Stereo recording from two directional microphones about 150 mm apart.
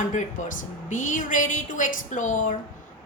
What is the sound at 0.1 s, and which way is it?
A woman's voice, 55° left (ahead or behind).